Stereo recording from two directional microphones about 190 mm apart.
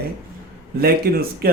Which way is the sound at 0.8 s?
55° right (ahead or behind).